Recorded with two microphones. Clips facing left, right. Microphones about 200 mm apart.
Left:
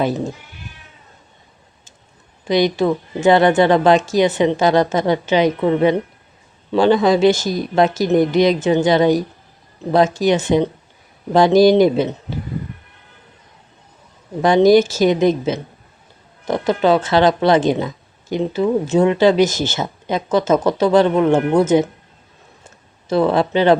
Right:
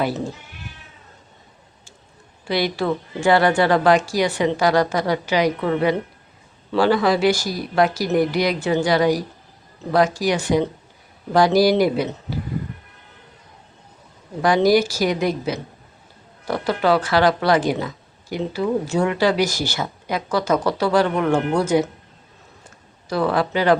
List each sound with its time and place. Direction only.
2.4 s speech: 20° left (ahead or behind)
14.4 s speech: 25° left (ahead or behind)
22.6 s a sound: 25° left (ahead or behind)